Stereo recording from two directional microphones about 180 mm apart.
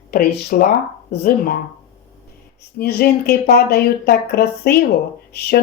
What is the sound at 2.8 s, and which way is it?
Speech, 60° left (ahead or behind).